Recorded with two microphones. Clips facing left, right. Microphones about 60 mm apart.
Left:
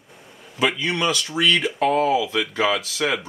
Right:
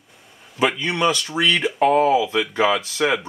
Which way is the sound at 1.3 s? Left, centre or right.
Centre.